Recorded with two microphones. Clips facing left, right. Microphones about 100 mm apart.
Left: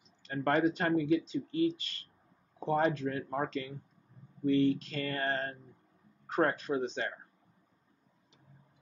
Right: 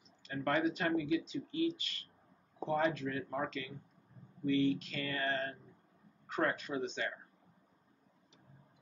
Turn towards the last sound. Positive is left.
turn(degrees=40)  # may be behind; listen again after turning